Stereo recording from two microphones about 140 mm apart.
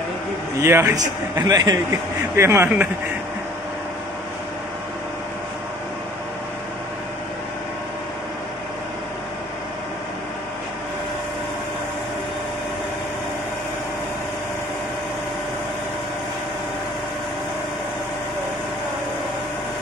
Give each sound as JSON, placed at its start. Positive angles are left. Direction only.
{"t": 0.6, "sound": "a man's voice", "side_deg": -20}